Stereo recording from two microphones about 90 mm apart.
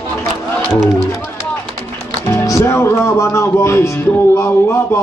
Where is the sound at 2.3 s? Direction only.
30° left (ahead or behind).